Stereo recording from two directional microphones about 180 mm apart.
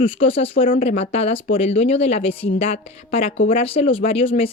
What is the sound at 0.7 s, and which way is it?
Speech, 50° left (ahead or behind).